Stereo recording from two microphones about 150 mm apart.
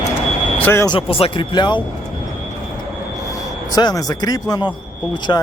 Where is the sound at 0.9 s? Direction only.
35° left (ahead or behind).